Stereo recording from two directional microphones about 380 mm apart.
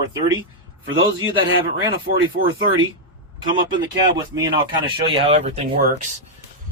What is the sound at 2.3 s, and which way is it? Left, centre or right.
Speech, right.